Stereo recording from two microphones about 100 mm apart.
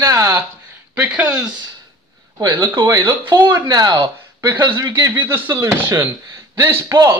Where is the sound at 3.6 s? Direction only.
40° right (ahead or behind).